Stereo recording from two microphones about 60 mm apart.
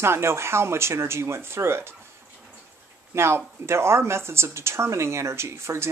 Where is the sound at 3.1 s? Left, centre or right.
Right.